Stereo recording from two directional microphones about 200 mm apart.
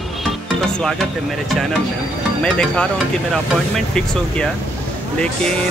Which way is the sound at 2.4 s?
5° left (ahead or behind).